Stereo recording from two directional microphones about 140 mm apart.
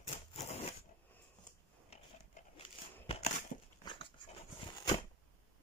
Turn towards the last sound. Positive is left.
turn(degrees=30)  # may be behind; listen again after turning